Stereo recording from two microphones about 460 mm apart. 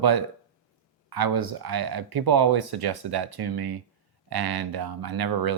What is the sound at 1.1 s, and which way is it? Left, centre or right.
Speech, right.